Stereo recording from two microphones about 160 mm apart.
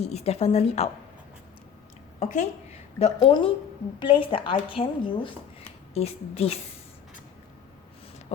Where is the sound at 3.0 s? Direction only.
40° left (ahead or behind).